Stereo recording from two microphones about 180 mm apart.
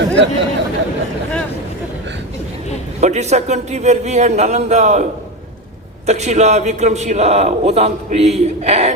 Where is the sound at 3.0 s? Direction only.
40° right (ahead or behind).